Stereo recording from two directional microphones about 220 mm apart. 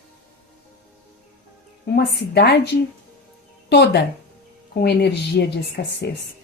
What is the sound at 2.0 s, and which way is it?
Speech, 50° left (ahead or behind).